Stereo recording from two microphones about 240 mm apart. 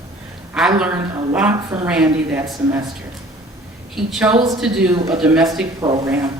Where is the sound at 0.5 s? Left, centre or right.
Centre.